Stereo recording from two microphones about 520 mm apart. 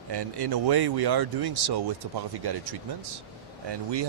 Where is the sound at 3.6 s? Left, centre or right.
Right.